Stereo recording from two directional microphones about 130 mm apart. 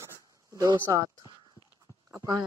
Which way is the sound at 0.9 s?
25° right (ahead or behind).